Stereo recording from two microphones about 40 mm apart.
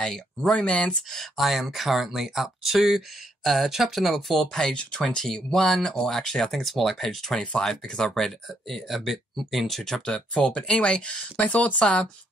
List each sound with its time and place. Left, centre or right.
0.0 s speech: centre
0.5 s speech: left
1.1 s speech: centre
4.7 s speech: centre
6.0 s speech: centre
10.1 s speech: centre; by 11.7 s left